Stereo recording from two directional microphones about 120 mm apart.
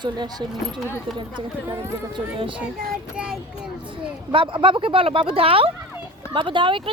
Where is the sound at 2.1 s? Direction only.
45° right (ahead or behind).